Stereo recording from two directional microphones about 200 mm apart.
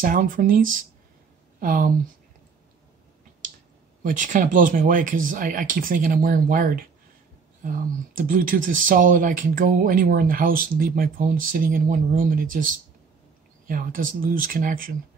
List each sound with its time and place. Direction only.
0.0 s speech: 40° right (ahead or behind)
4.0 s speech: 40° right (ahead or behind)
13.7 s speech: 40° right (ahead or behind)